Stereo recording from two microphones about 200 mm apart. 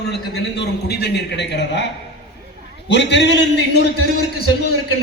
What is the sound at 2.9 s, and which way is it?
Speech, 60° left (ahead or behind).